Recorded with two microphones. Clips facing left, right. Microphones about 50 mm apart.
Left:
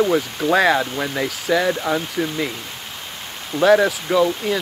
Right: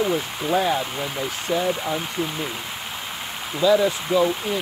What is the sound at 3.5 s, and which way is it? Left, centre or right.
Speech, left.